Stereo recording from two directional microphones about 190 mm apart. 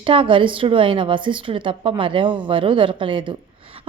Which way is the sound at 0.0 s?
25° right (ahead or behind).